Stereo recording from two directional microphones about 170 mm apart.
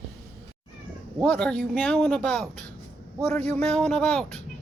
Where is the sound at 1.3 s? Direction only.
5° left (ahead or behind).